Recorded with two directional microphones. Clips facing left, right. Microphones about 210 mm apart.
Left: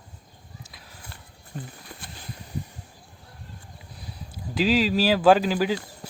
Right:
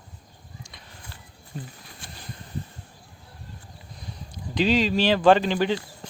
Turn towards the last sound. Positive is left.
turn(degrees=5)  # may be behind; listen again after turning